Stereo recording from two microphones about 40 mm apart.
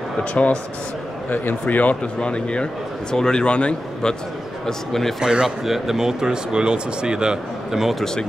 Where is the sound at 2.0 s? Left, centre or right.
Left.